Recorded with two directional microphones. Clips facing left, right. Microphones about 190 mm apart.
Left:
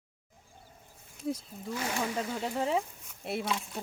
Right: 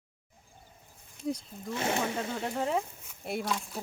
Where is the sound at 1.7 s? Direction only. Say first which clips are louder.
Right 2 dB; 25° right (ahead or behind).